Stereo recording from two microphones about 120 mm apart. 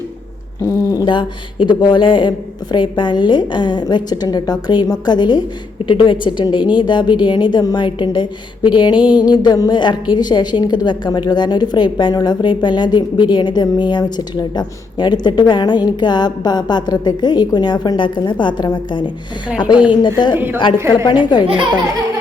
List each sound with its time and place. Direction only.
0.9 s a woman's voice: 40° left (ahead or behind)
21.4 s speech: 45° right (ahead or behind)